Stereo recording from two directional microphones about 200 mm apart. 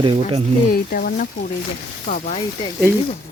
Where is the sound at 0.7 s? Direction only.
50° left (ahead or behind).